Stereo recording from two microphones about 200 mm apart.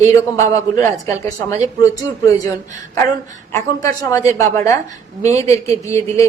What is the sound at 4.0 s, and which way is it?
A woman's voice, 15° left (ahead or behind).